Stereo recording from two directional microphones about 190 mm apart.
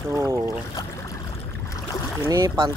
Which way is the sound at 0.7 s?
20° left (ahead or behind).